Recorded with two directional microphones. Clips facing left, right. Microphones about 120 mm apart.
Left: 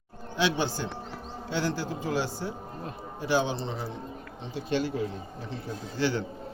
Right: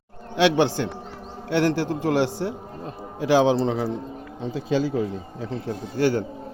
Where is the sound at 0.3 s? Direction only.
80° right.